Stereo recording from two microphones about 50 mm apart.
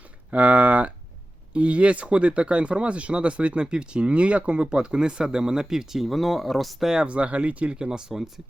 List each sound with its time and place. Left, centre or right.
0.3 s speech: right; by 6.9 s centre
6.9 s speech: right
7.8 s speech: centre